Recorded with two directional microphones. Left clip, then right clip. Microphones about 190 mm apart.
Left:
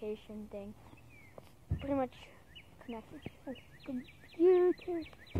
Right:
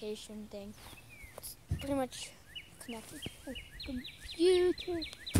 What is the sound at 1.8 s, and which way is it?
Speech, 50° right (ahead or behind).